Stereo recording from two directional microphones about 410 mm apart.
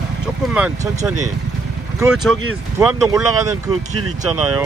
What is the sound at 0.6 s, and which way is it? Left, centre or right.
Speech, centre.